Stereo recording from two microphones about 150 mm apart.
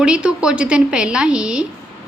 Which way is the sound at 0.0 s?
5° right (ahead or behind).